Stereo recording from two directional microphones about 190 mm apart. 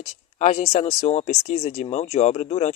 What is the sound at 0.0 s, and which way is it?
Speech, 35° left (ahead or behind).